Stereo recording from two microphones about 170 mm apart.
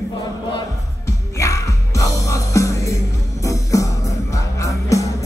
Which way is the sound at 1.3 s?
20° left (ahead or behind).